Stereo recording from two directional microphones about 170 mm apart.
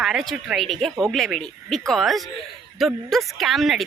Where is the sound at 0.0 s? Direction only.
Centre (ahead or behind).